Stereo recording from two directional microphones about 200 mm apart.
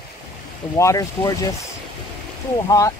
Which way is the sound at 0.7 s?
15° left (ahead or behind).